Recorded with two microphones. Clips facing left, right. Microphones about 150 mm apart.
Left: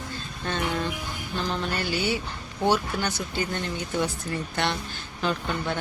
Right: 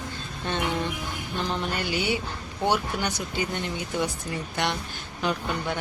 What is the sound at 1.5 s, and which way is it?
Speech, 15° right (ahead or behind).